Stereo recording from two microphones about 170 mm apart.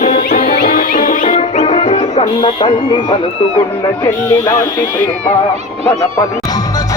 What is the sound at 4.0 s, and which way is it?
Speech, 15° left (ahead or behind).